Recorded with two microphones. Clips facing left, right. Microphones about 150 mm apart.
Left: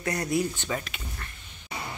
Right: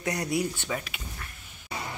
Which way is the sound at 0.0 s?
15° right (ahead or behind).